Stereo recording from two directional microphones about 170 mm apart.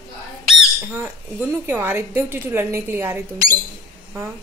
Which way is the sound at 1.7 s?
10° right (ahead or behind).